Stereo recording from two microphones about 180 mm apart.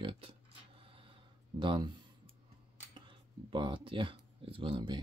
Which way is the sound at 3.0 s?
25° right (ahead or behind).